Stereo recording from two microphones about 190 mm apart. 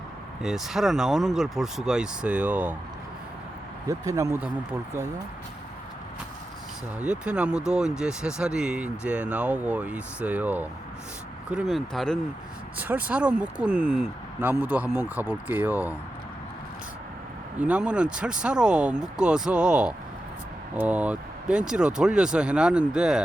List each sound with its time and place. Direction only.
0.4 s speech: centre (ahead or behind)
3.8 s speech: 15° right (ahead or behind)
7.0 s speech: 5° right (ahead or behind)
12.7 s speech: 10° right (ahead or behind)
17.6 s speech: 5° right (ahead or behind)